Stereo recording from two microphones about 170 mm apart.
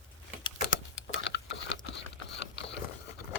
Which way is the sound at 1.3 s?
90° left.